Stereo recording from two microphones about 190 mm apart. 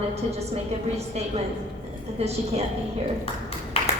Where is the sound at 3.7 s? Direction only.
30° left (ahead or behind).